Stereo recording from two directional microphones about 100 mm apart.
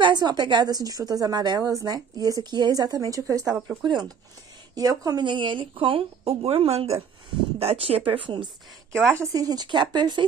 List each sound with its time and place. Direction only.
0.0 s a woman's voice: 45° right (ahead or behind)
3.8 s a woman's voice: 45° right (ahead or behind)
5.2 s speech: 60° right (ahead or behind)
9.2 s a woman's voice: 35° right (ahead or behind)